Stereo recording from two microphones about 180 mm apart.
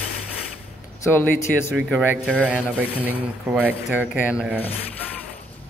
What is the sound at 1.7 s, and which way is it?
Speech, 5° right (ahead or behind).